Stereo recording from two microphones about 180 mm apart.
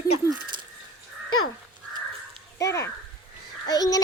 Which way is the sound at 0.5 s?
25° right (ahead or behind).